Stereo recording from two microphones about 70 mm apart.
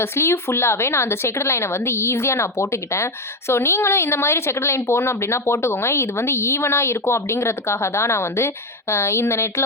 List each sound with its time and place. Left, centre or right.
0.0 s a woman's voice: left